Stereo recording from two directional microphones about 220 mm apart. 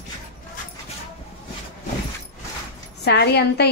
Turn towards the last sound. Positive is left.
turn(degrees=50)  # may be behind; listen again after turning